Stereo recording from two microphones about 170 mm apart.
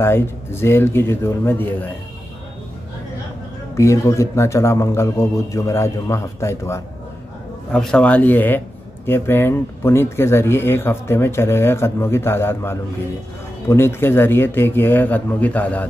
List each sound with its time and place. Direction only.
0.0 s speech: 15° left (ahead or behind)
3.7 s speech: 15° left (ahead or behind)
7.7 s speech: 5° left (ahead or behind)